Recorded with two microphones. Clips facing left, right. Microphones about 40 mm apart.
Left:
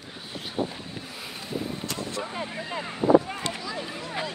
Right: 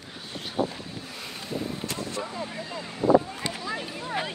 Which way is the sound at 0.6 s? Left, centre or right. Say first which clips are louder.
Right 2 dB; centre.